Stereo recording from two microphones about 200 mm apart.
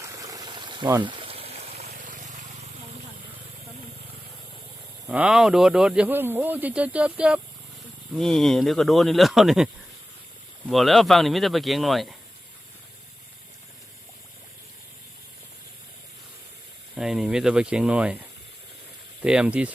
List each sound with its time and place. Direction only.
0.0 s pour: 15° right (ahead or behind)
1.0 s trickle: 25° right (ahead or behind)
5.0 s speech: 5° right (ahead or behind)
10.7 s speech: centre (ahead or behind)
17.0 s speech: centre (ahead or behind)
19.2 s speech: 5° right (ahead or behind)